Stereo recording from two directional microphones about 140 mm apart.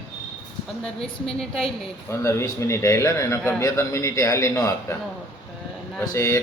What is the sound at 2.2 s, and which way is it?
A man's voice, 20° left (ahead or behind).